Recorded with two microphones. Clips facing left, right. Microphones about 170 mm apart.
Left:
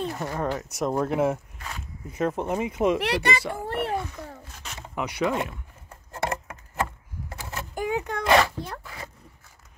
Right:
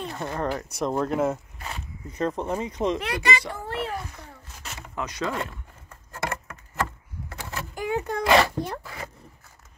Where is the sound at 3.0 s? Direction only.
70° left (ahead or behind).